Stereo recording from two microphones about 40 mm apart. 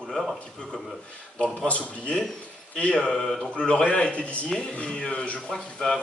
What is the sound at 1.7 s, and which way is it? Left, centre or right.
Speech, left.